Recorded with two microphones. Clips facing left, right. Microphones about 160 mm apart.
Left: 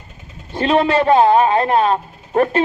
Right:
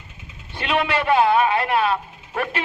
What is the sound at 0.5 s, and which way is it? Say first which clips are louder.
A man's voice: left 7 dB; 35° left (ahead or behind).